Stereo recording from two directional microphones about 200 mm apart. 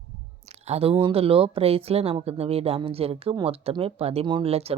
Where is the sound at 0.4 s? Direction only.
30° right (ahead or behind).